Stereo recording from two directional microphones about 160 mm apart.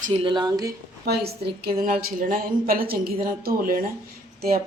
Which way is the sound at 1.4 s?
90° right.